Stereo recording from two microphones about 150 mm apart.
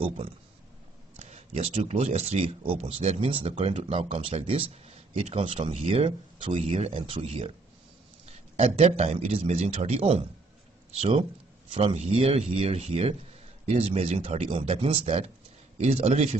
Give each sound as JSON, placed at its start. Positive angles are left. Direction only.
{"t": 1.1, "sound": "speech", "side_deg": -45}